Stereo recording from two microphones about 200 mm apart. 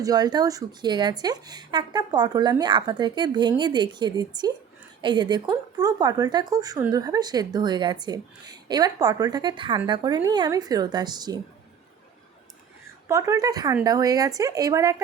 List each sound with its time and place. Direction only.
0.0 s speech: 20° right (ahead or behind)
13.1 s speech: 15° right (ahead or behind)